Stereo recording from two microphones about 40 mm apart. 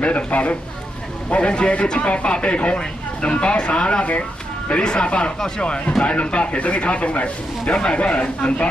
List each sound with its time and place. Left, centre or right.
0.0 s speech: left